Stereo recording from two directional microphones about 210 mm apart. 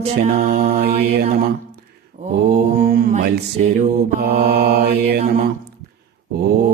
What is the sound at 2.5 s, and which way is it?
Mantra, 45° right (ahead or behind).